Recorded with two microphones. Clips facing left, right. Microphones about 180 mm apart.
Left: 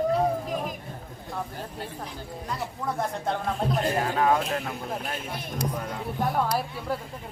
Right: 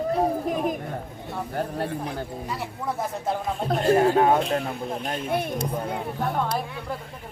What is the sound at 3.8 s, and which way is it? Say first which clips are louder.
Speech: right 7 dB; 30° right (ahead or behind).